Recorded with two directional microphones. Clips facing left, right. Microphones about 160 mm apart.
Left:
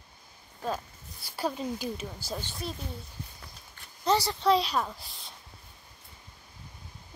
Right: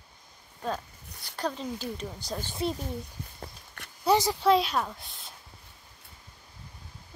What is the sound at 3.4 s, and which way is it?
Walk, 65° right (ahead or behind).